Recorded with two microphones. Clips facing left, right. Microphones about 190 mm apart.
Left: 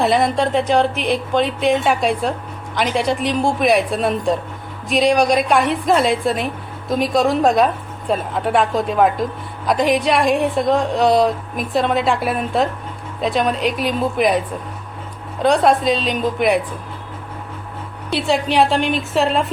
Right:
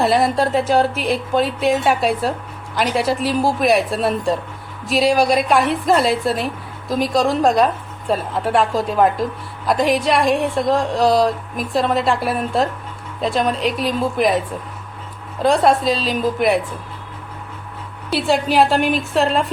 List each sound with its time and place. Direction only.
0.0 s a woman's voice: centre (ahead or behind)
18.1 s a woman's voice: centre (ahead or behind)